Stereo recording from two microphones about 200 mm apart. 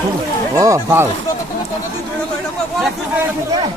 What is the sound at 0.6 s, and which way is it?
Speech, 15° right (ahead or behind).